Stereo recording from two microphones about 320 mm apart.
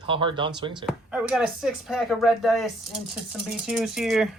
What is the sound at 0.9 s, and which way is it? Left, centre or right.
Speech, centre.